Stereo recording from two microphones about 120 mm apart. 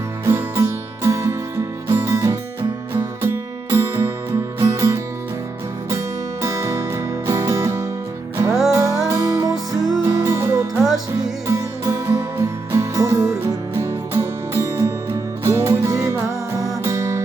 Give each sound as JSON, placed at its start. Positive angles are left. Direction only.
{"t": 0.3, "sound": "music", "side_deg": -25}
{"t": 6.4, "sound": "music", "side_deg": -25}